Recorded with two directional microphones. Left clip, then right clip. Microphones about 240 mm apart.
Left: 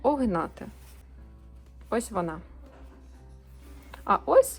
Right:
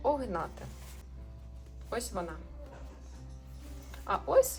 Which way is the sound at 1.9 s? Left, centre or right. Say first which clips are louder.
Left 7 dB; left.